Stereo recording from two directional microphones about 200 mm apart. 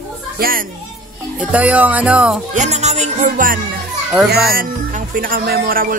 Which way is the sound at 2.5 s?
35° right (ahead or behind).